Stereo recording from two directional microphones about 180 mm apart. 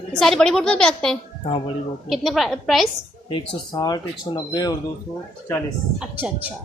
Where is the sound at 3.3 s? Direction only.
25° left (ahead or behind).